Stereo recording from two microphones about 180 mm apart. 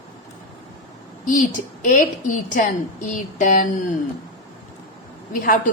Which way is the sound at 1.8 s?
45° left (ahead or behind).